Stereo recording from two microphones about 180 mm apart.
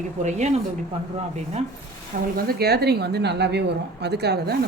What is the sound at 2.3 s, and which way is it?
A woman's voice, 60° right (ahead or behind).